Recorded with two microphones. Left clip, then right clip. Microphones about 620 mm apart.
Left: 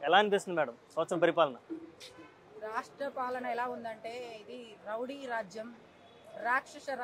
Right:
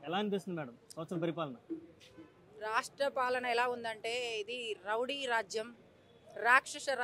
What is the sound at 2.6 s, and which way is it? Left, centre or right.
Speech, right.